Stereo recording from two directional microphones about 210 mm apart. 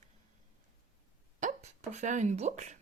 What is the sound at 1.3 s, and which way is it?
Speech, 35° right (ahead or behind).